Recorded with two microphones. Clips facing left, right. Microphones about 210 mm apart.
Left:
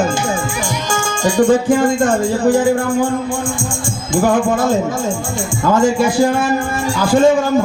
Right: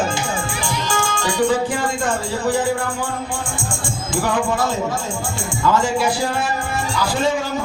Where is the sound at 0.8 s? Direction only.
45° left (ahead or behind).